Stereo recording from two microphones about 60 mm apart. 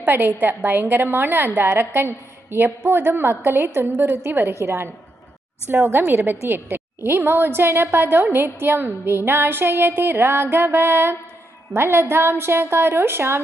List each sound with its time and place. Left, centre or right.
0.0 s a woman's voice: right
4.6 s a woman's voice: right